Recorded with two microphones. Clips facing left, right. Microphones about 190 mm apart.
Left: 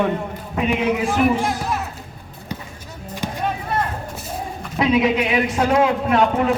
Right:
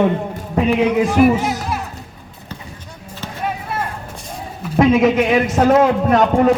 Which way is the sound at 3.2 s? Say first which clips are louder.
Left 4 dB; 15° left (ahead or behind).